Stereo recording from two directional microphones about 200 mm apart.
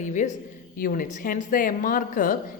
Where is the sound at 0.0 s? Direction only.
40° left (ahead or behind).